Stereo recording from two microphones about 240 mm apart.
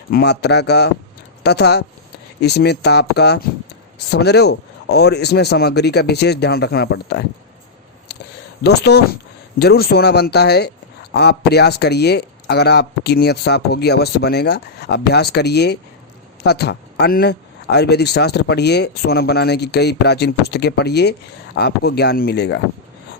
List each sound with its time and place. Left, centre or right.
0.1 s a man's voice: left
8.6 s a man's voice: left